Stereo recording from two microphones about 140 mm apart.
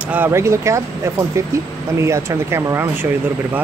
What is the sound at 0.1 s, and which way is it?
Speech, 15° right (ahead or behind).